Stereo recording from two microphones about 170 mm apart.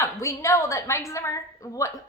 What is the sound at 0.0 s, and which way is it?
A woman's voice, 15° left (ahead or behind).